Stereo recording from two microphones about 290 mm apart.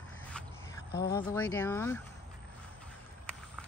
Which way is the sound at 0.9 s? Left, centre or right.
Left.